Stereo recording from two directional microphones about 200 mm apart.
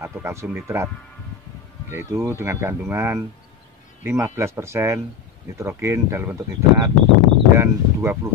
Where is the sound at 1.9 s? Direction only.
10° right (ahead or behind).